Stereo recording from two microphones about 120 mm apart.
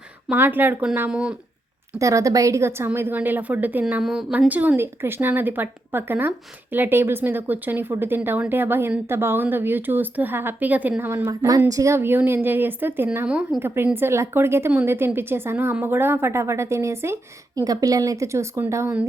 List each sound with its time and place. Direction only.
0.3 s a woman's voice: 15° right (ahead or behind)
2.0 s a woman's voice: 25° right (ahead or behind)
4.0 s a woman's voice: 5° right (ahead or behind)
13.6 s a woman's voice: 20° right (ahead or behind)